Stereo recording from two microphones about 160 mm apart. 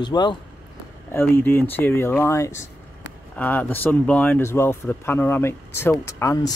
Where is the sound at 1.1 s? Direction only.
15° left (ahead or behind).